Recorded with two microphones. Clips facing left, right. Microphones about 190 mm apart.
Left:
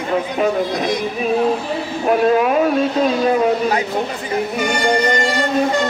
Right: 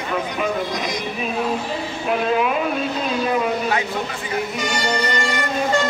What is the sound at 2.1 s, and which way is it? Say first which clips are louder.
Speech: left 6 dB; 40° left (ahead or behind).